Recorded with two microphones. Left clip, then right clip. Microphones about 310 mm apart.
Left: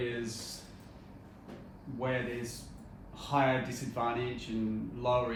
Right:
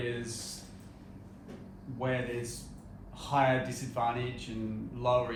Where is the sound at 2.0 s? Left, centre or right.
Right.